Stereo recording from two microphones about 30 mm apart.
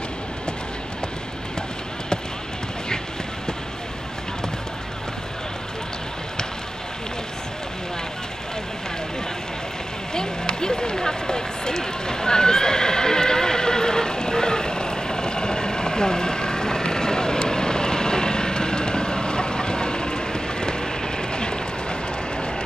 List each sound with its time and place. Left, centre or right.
10.1 s run: left